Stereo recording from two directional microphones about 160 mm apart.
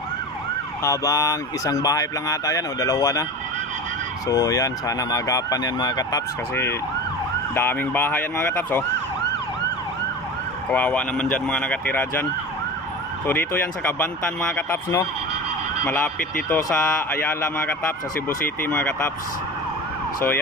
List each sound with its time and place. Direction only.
0.8 s speech: 20° left (ahead or behind)
4.3 s a man's voice: 20° left (ahead or behind)
10.7 s a man's voice: 10° left (ahead or behind)
13.3 s a man's voice: 15° left (ahead or behind)